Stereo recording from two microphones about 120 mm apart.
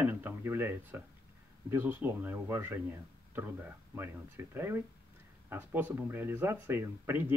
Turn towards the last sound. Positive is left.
turn(degrees=-15)  # may be behind; listen again after turning